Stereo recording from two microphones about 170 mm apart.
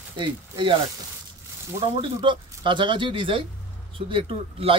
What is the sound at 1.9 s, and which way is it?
Speech, 30° right (ahead or behind).